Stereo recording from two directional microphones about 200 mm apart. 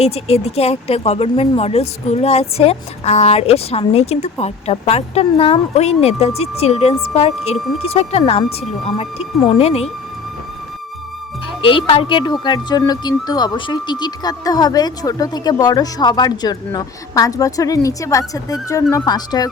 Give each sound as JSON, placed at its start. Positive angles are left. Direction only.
{"t": 0.0, "sound": "speech", "side_deg": 30}
{"t": 11.6, "sound": "speech", "side_deg": 25}